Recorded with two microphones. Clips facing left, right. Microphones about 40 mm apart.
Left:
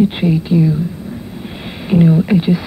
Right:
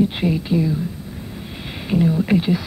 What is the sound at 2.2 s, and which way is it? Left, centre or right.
Speech, centre.